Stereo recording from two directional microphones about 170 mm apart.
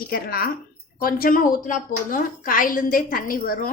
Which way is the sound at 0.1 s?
60° left (ahead or behind).